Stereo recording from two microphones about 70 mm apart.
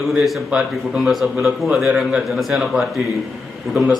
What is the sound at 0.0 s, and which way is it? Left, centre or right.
A man's voice, centre.